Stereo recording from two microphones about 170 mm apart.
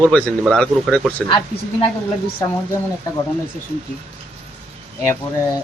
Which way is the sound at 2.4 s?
15° left (ahead or behind).